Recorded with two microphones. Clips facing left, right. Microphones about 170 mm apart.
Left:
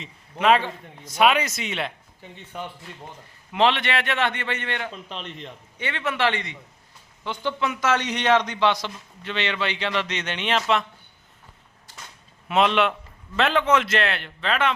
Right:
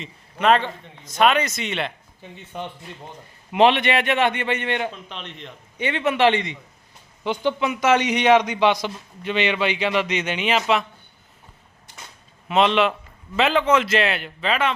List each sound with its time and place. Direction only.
0.0 s a man's voice: 5° left (ahead or behind)
2.2 s a man's voice: 15° right (ahead or behind)
5.0 s a man's voice: centre (ahead or behind)
5.7 s a man's voice: 15° right (ahead or behind)
11.9 s a sound: 20° right (ahead or behind)
12.5 s a man's voice: centre (ahead or behind)